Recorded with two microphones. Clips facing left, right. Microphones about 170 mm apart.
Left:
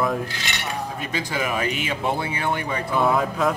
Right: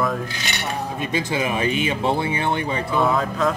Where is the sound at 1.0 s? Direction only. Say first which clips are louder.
Right 5 dB; 25° right (ahead or behind).